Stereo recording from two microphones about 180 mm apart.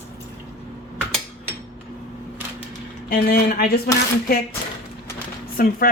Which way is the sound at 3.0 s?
55° left (ahead or behind).